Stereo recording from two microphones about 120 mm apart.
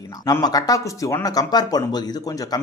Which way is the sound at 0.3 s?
30° left (ahead or behind).